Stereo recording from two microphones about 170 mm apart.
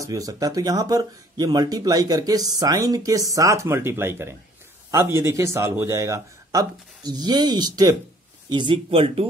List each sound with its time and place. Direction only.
0.0 s a man's voice: 20° right (ahead or behind)